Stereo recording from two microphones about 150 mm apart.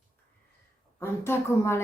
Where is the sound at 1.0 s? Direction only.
15° left (ahead or behind).